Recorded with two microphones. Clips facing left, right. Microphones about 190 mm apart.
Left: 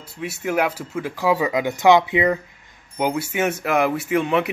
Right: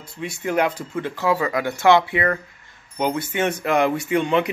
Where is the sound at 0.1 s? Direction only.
5° left (ahead or behind).